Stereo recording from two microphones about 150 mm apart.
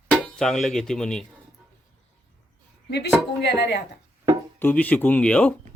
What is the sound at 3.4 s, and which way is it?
Speech, 90° left.